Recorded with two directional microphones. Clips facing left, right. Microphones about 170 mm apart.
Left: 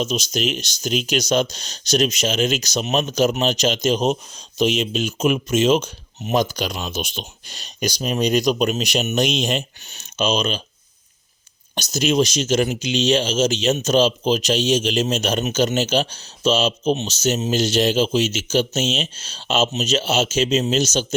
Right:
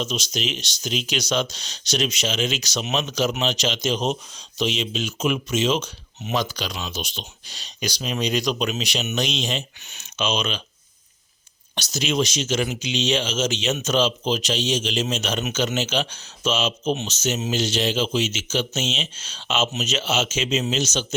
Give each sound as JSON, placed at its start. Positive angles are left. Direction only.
{"t": 0.0, "sound": "speech", "side_deg": 45}
{"t": 9.9, "sound": "speech", "side_deg": 40}
{"t": 11.7, "sound": "speech", "side_deg": 45}